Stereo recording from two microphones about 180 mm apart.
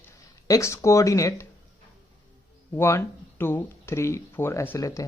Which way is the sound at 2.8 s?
15° left (ahead or behind).